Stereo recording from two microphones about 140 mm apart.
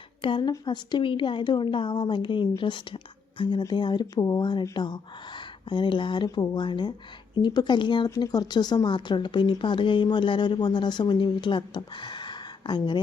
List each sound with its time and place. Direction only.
0.2 s speech: 35° left (ahead or behind)